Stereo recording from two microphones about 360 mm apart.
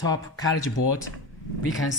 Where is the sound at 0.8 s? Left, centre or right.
Left.